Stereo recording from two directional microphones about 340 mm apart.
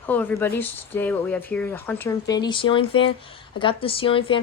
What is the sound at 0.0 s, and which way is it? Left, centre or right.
Speech, centre.